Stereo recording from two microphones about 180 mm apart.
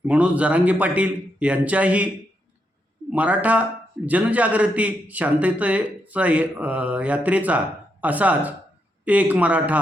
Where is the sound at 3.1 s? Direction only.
10° right (ahead or behind).